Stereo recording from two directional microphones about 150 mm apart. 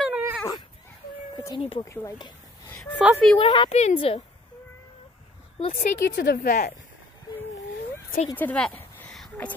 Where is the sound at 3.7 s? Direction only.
45° left (ahead or behind).